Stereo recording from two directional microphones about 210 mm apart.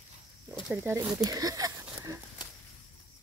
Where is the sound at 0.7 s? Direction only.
15° right (ahead or behind).